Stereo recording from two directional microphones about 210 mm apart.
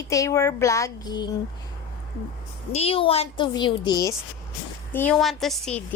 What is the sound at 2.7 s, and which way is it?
A woman's voice, 30° left (ahead or behind).